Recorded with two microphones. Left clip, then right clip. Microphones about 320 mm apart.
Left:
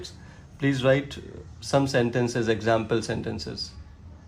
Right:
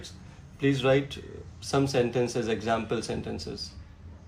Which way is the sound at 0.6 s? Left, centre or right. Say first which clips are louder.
Left 2 dB; left.